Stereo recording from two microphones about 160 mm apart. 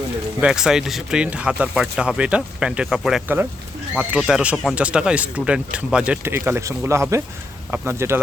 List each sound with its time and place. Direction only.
0.4 s speech: 5° right (ahead or behind)